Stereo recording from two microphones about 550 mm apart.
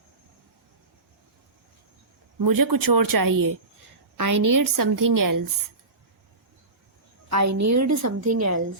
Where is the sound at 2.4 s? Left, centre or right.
Right.